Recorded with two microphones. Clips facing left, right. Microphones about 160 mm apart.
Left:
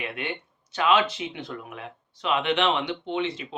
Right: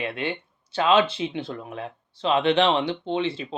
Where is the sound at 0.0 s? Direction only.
30° right (ahead or behind).